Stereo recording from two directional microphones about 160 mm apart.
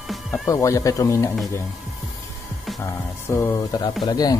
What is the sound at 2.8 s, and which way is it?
Speech, 15° left (ahead or behind).